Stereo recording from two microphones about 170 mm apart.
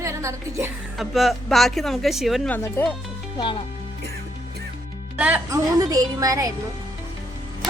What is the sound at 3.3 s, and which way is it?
Speech, 25° left (ahead or behind).